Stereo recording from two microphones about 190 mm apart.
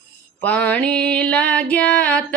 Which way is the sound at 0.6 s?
5° left (ahead or behind).